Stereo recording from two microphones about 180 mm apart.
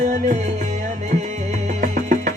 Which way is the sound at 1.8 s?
40° right (ahead or behind).